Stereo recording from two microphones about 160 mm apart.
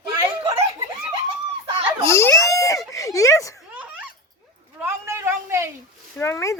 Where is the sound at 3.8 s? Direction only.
10° right (ahead or behind).